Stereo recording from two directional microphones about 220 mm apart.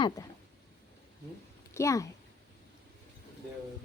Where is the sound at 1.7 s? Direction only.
15° left (ahead or behind).